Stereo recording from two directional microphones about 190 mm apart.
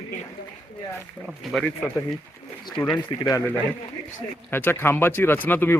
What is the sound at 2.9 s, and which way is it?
Speech, 20° left (ahead or behind).